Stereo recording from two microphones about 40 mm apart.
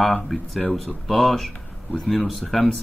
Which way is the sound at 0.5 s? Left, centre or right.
Left.